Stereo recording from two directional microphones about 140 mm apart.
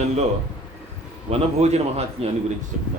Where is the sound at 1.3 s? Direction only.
50° right (ahead or behind).